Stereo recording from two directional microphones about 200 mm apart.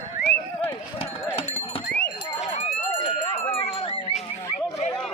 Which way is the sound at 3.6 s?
30° left (ahead or behind).